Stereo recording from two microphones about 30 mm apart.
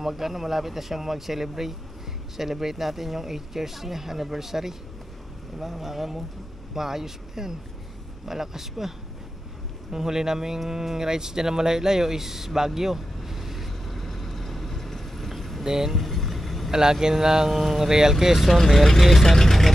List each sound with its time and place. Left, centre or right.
0.0 s speech: centre
10.7 s a sound: centre
15.6 s speech: centre
15.9 s vehicle: centre
17.0 s speech: centre
17.5 s speech: centre
18.5 s speech: centre
19.3 s vehicle: centre